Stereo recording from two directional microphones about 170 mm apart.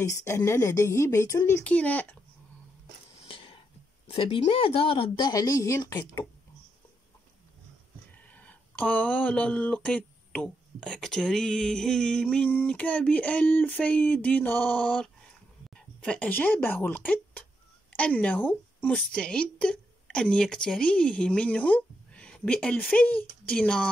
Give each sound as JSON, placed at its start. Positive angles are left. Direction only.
{"t": 0.0, "sound": "speech", "side_deg": 15}
{"t": 3.3, "sound": "a sound", "side_deg": 30}
{"t": 4.1, "sound": "speech", "side_deg": 35}
{"t": 8.3, "sound": "a woman's voice", "side_deg": 10}